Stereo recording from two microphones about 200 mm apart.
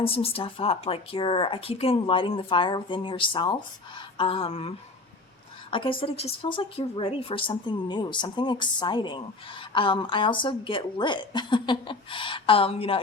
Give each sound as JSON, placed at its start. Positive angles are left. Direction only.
{"t": 0.0, "sound": "a woman's voice", "side_deg": 30}
{"t": 5.7, "sound": "a woman's voice", "side_deg": 25}